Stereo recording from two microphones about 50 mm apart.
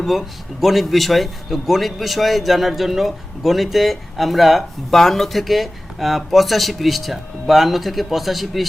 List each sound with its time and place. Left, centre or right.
0.0 s a man's voice: centre